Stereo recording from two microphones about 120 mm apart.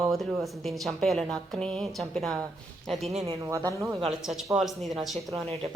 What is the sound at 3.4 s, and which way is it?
Speech, 25° right (ahead or behind).